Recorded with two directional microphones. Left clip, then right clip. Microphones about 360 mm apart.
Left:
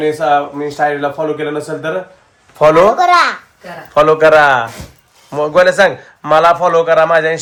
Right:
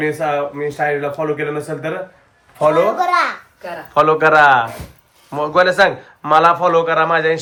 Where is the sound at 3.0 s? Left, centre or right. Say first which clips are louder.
Left 6 dB; left.